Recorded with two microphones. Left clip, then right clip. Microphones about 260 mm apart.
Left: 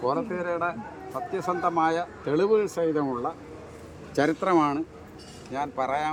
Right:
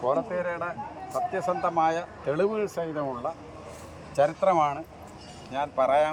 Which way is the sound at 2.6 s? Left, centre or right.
Centre.